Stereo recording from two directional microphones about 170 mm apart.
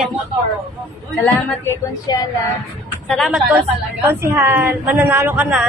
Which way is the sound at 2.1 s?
25° left (ahead or behind).